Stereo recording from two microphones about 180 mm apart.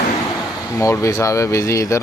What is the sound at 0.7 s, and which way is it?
Speech, 15° left (ahead or behind).